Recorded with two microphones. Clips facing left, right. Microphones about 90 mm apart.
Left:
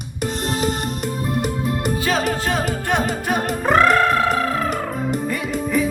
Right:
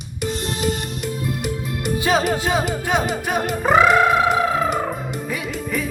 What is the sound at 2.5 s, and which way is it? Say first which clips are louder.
Music: right 1 dB; 5° right (ahead or behind).